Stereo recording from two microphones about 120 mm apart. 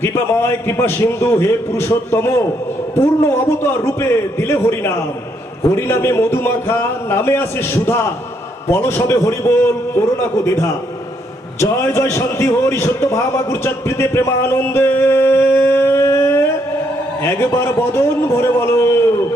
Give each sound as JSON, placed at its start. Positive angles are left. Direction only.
{"t": 0.0, "sound": "a man's voice", "side_deg": 20}